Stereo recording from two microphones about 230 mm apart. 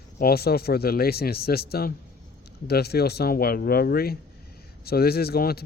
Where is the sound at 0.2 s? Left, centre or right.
Left.